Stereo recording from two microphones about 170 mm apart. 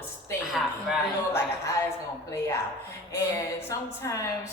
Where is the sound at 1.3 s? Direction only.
15° left (ahead or behind).